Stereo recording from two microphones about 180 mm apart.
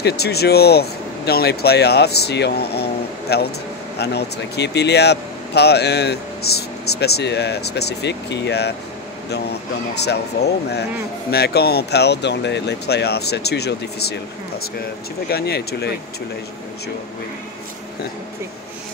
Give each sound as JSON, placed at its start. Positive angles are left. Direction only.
{"t": 0.0, "sound": "speech", "side_deg": 65}
{"t": 9.9, "sound": "speech", "side_deg": 65}
{"t": 15.2, "sound": "speech", "side_deg": 60}